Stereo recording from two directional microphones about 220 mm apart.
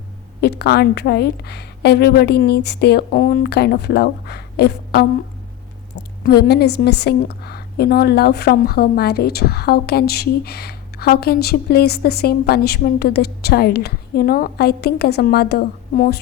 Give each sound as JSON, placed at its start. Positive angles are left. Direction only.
{"t": 0.4, "sound": "a woman's voice", "side_deg": 45}